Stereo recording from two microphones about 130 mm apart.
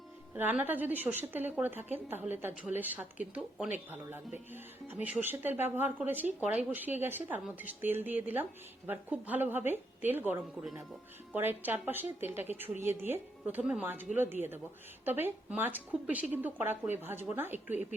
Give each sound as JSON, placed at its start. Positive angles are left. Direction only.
{"t": 0.3, "sound": "a woman's voice", "side_deg": -15}